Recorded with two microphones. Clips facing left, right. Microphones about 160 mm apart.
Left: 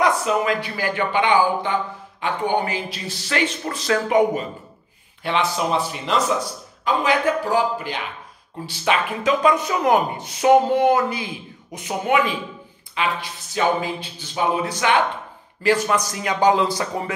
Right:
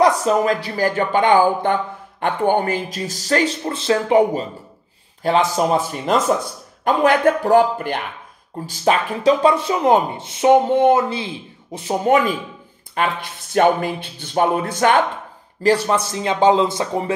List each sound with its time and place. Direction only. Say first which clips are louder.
0.0 s speech: right 4 dB; 40° right (ahead or behind)
3.6 s speech: right 3 dB; 30° right (ahead or behind); by 8.0 s 55° right (ahead or behind)
8.6 s speech: right 3 dB; 40° right (ahead or behind)
15.6 s speech: right 3 dB; 35° right (ahead or behind)